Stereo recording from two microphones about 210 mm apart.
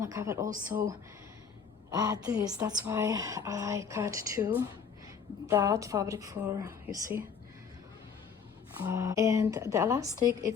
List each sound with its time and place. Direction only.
0.0 s speech: 15° right (ahead or behind)
1.9 s speech: 15° right (ahead or behind)
8.8 s speech: 15° right (ahead or behind)